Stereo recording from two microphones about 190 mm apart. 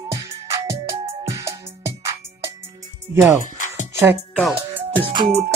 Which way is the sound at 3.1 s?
15° right (ahead or behind).